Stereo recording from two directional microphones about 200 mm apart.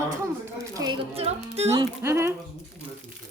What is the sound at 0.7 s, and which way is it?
Speech, 20° right (ahead or behind).